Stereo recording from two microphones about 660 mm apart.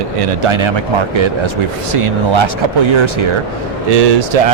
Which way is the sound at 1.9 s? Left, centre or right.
Right.